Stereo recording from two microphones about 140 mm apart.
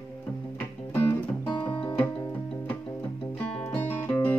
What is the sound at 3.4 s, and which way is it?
Music, 10° left (ahead or behind).